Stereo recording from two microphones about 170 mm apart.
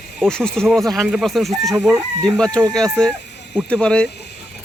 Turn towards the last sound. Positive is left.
turn(degrees=5)  # may be behind; listen again after turning